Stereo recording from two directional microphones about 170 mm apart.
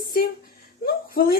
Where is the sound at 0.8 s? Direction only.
60° left (ahead or behind).